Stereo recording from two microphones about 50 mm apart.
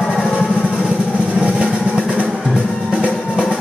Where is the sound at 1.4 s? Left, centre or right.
Right.